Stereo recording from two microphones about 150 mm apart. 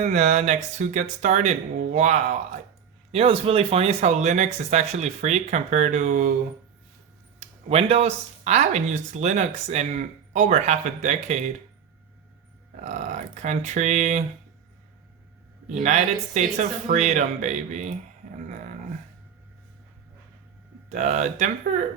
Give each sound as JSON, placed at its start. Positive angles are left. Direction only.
{"t": 0.0, "sound": "speech", "side_deg": -50}
{"t": 3.1, "sound": "speech", "side_deg": -40}
{"t": 7.3, "sound": "speech", "side_deg": -40}
{"t": 12.7, "sound": "speech", "side_deg": -50}
{"t": 15.7, "sound": "speech", "side_deg": -50}
{"t": 20.9, "sound": "speech", "side_deg": -50}